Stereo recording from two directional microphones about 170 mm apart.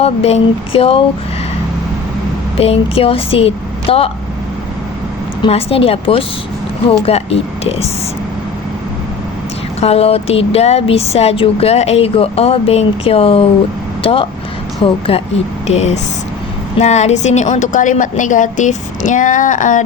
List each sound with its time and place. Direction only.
0.0 s speech: 35° left (ahead or behind)
2.6 s speech: 35° left (ahead or behind)
5.4 s speech: 35° left (ahead or behind)
9.8 s a woman's voice: 35° left (ahead or behind)